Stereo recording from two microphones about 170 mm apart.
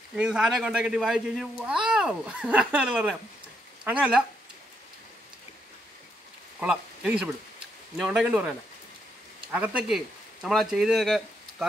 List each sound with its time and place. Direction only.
0.1 s speech: 5° right (ahead or behind)
6.6 s speech: 5° right (ahead or behind)